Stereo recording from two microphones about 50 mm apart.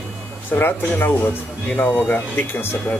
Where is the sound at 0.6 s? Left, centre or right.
Left.